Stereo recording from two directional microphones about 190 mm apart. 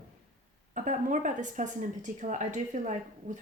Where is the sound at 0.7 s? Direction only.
45° right (ahead or behind).